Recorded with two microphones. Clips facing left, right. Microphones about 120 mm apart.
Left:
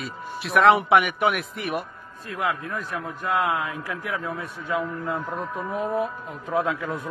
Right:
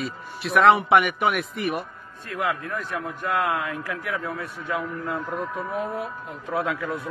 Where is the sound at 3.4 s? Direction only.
15° left (ahead or behind).